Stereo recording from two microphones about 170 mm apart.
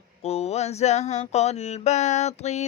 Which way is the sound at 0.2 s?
40° left (ahead or behind).